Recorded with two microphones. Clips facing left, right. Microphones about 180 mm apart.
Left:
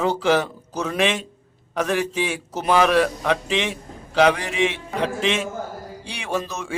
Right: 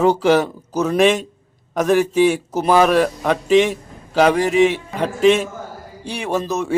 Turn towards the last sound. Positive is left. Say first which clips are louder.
# right 6 dB
turn(degrees=-40)  # may be behind; listen again after turning